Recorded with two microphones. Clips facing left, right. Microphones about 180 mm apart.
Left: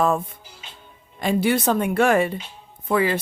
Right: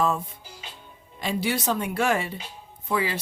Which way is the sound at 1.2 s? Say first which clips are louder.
Left 6 dB; 50° left (ahead or behind).